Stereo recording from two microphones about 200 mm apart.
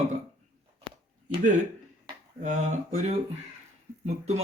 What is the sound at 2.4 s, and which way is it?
A man's voice, 35° right (ahead or behind).